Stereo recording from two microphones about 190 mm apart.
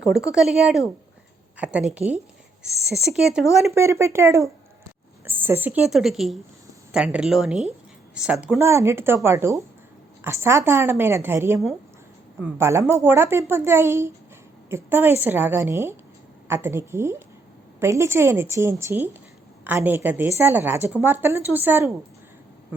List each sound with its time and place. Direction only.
0.0 s a woman's voice: 5° right (ahead or behind)
2.0 s speech: 30° right (ahead or behind)
2.9 s speech: centre (ahead or behind)
3.8 s a woman's voice: 15° right (ahead or behind)